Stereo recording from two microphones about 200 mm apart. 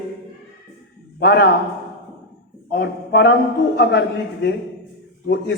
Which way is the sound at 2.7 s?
55° left (ahead or behind).